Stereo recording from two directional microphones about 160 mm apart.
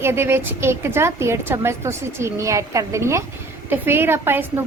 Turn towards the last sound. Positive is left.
turn(degrees=-15)  # may be behind; listen again after turning